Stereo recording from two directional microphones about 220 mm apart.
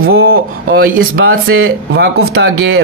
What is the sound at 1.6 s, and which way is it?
Speech, 50° right (ahead or behind).